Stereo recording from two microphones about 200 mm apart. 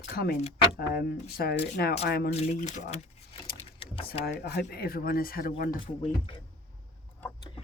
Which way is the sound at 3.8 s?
30° left (ahead or behind).